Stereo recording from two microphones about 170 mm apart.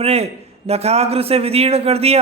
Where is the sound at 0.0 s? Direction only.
35° right (ahead or behind).